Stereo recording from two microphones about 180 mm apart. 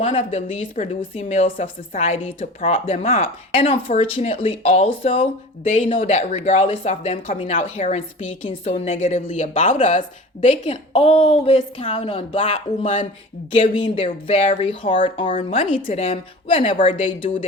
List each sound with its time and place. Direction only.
0.0 s speech: 30° left (ahead or behind)